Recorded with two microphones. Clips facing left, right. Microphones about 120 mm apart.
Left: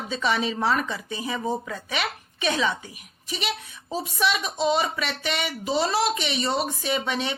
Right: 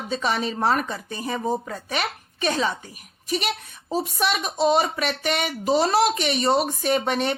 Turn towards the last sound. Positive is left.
turn(degrees=-50)  # may be behind; listen again after turning